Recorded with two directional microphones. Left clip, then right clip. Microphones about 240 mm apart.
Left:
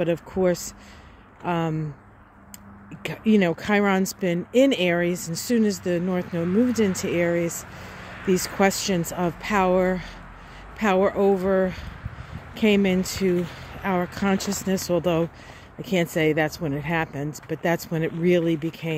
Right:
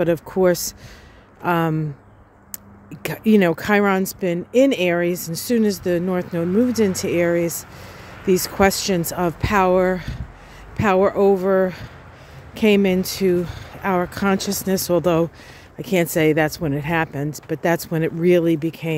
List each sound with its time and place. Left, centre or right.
0.0 s speech: centre
3.0 s speech: centre